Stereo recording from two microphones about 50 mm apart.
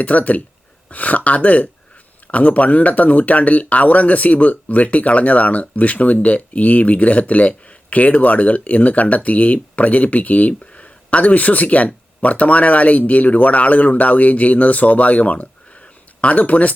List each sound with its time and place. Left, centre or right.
0.0 s speech: left